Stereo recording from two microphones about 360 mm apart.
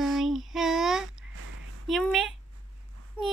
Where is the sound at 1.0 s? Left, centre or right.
Right.